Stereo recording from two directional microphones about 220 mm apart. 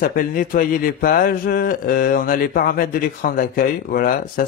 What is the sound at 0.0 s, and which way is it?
Speech, 40° left (ahead or behind).